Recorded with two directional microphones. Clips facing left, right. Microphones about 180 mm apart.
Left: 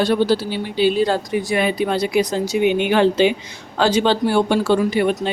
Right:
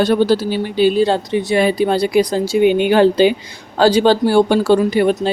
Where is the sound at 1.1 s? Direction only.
25° right (ahead or behind).